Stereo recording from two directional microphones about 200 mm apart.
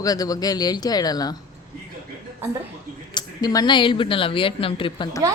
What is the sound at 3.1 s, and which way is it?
Speech, 20° left (ahead or behind).